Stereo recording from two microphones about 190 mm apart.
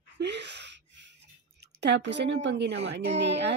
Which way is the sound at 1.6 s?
65° right (ahead or behind).